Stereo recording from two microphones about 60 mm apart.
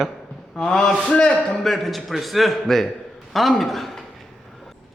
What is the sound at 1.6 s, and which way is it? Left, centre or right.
A man's voice, centre.